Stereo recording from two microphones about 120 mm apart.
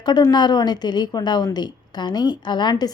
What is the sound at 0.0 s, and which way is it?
A woman's voice, 40° left (ahead or behind).